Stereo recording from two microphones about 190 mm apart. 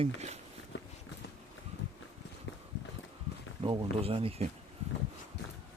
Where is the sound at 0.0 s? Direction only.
35° right (ahead or behind).